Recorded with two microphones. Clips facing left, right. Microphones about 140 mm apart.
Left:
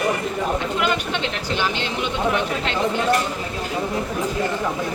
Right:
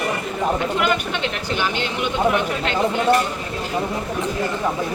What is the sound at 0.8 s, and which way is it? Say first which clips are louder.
Speech: right 1 dB; 25° left (ahead or behind).